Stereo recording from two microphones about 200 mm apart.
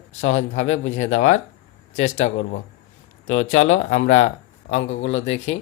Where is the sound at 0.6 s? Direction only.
70° left (ahead or behind).